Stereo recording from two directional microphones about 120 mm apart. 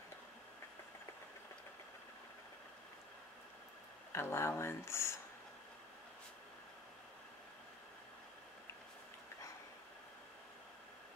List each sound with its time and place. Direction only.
4.1 s speech: 20° left (ahead or behind)